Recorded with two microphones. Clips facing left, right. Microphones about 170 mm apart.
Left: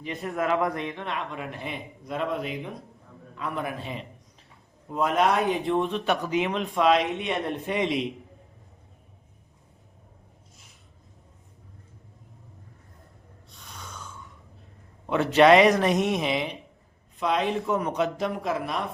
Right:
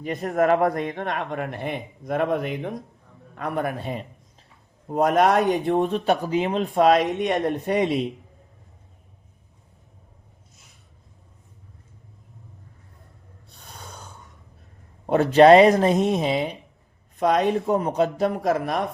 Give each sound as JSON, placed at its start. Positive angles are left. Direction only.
{"t": 0.0, "sound": "speech", "side_deg": -45}
{"t": 13.6, "sound": "snoring", "side_deg": -35}
{"t": 15.0, "sound": "speech", "side_deg": -40}
{"t": 17.2, "sound": "speech", "side_deg": -45}
{"t": 17.7, "sound": "speech", "side_deg": -35}